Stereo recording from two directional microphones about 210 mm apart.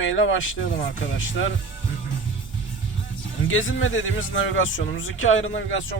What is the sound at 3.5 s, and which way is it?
Speech, 65° left (ahead or behind).